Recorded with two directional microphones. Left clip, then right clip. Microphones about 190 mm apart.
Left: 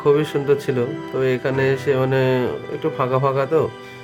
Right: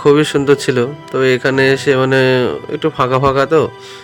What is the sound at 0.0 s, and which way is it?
Speech, 20° right (ahead or behind).